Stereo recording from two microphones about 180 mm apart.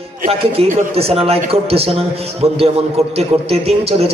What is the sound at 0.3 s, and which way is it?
A man's voice, 35° right (ahead or behind).